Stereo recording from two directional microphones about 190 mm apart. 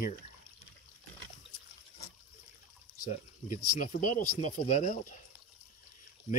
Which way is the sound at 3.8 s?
40° left (ahead or behind).